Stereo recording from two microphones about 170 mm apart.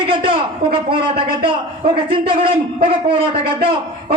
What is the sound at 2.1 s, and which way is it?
A man's voice, 30° right (ahead or behind).